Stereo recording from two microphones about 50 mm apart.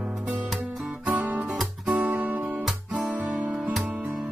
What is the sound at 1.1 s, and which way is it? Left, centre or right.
Music, right.